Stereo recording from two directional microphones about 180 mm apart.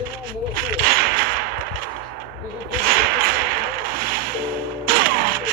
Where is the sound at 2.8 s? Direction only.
55° right (ahead or behind).